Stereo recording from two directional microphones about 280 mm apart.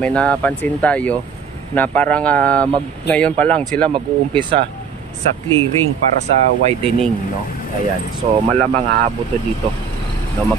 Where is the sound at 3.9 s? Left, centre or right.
Centre.